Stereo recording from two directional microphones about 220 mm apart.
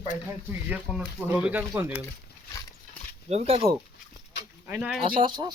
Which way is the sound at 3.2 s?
30° right (ahead or behind).